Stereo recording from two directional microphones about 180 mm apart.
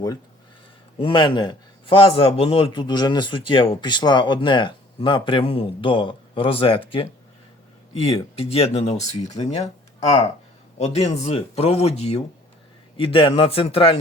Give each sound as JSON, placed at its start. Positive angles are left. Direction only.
{"t": 0.9, "sound": "a man's voice", "side_deg": 25}
{"t": 10.8, "sound": "speech", "side_deg": 35}